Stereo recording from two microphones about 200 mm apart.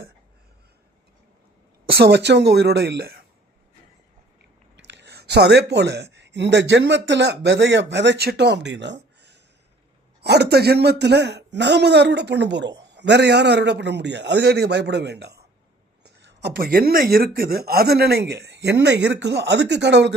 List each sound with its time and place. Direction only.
1.9 s a man's voice: 55° right (ahead or behind)
4.8 s a man's voice: 60° right (ahead or behind)